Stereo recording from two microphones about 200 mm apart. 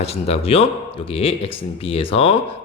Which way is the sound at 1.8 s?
30° left (ahead or behind).